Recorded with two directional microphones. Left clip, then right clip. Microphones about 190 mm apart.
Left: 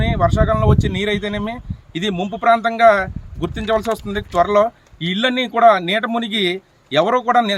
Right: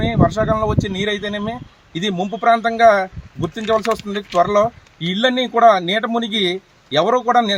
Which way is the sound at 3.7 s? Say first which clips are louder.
Right 1 dB; 25° left (ahead or behind).